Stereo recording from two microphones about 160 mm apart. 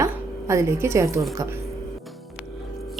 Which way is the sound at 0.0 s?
15° right (ahead or behind).